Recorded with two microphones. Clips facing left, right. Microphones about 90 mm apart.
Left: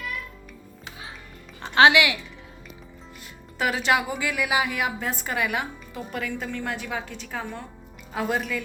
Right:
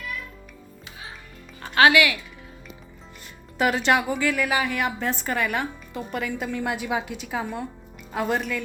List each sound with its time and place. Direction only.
1.6 s speech: 20° left (ahead or behind)
3.6 s a woman's voice: centre (ahead or behind)